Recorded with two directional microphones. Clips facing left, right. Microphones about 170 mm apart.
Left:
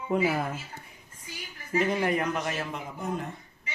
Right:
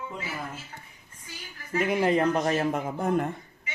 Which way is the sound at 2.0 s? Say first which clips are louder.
Right 5 dB; 30° right (ahead or behind).